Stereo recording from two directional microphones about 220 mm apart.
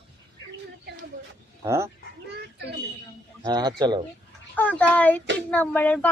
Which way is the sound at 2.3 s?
50° right (ahead or behind).